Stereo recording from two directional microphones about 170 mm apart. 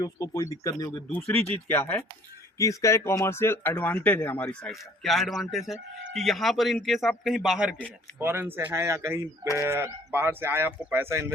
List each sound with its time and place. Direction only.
0.0 s speech: 20° left (ahead or behind); by 11.3 s 15° right (ahead or behind)